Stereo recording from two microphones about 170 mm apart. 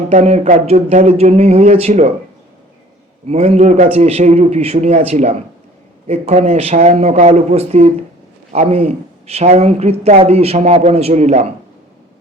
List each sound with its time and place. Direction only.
0.1 s speech: 45° right (ahead or behind)
3.2 s speech: 40° right (ahead or behind)